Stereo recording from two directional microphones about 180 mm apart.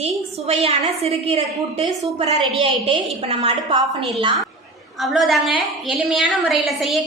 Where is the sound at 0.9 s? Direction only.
35° right (ahead or behind).